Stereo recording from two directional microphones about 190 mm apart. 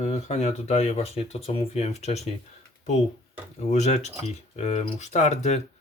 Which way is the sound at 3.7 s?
35° left (ahead or behind).